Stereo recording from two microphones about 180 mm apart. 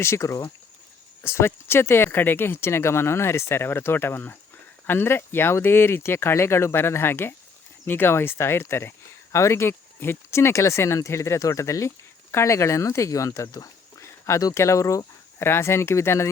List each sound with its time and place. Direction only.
0.0 s speech: 15° left (ahead or behind)